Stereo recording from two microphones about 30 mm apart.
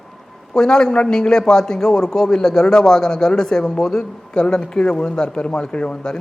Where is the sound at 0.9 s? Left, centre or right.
Left.